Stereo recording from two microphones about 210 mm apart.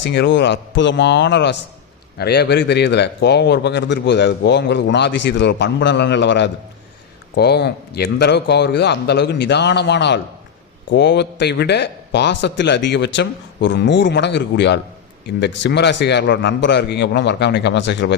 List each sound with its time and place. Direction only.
0.0 s a man's voice: 55° left (ahead or behind)